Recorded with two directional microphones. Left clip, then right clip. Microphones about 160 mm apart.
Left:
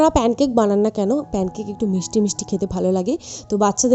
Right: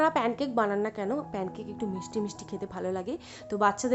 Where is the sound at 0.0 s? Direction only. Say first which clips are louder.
Left 10 dB; 45° left (ahead or behind).